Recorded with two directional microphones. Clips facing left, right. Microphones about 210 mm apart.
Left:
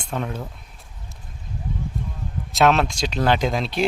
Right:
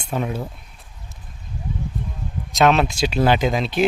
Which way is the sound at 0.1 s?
10° right (ahead or behind).